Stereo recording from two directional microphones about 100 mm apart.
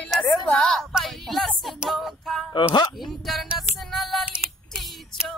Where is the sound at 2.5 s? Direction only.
50° left (ahead or behind).